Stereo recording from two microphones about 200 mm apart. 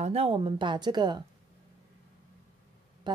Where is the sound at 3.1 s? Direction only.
20° right (ahead or behind).